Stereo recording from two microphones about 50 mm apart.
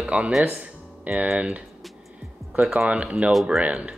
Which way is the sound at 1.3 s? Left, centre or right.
Right.